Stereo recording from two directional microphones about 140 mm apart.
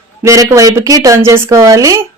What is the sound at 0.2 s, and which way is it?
Speech, 20° right (ahead or behind).